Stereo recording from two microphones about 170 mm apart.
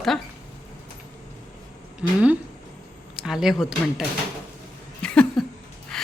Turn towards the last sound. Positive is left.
turn(degrees=5)  # may be behind; listen again after turning